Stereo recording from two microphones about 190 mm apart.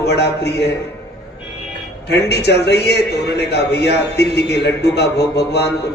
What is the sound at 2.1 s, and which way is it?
A man's voice, 60° left (ahead or behind).